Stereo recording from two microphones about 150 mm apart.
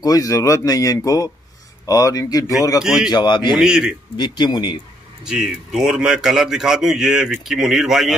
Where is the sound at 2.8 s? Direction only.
5° right (ahead or behind).